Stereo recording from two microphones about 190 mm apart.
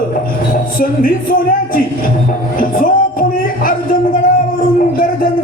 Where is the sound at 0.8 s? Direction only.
50° left (ahead or behind).